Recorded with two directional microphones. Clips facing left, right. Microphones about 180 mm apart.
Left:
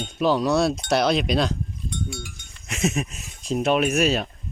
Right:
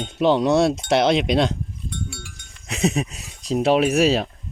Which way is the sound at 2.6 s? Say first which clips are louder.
Right 3 dB; 35° right (ahead or behind).